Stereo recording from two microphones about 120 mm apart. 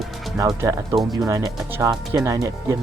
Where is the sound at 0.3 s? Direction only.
30° right (ahead or behind).